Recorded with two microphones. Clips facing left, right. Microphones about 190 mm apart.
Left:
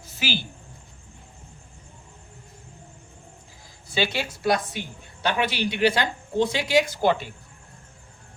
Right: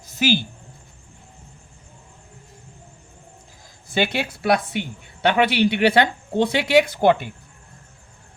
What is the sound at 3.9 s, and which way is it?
A woman's voice, 55° right (ahead or behind).